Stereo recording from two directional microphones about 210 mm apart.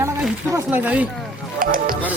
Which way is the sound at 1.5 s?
40° right (ahead or behind).